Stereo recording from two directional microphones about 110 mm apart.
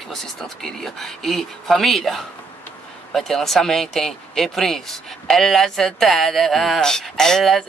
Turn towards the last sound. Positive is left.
turn(degrees=0)  # may be behind; listen again after turning